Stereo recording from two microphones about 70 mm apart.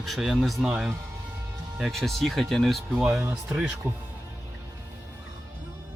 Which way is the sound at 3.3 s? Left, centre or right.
Right.